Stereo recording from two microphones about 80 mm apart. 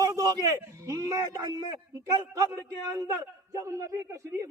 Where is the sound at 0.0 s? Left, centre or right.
Right.